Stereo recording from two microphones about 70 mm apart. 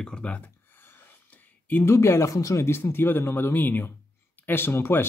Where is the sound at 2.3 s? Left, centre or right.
Left.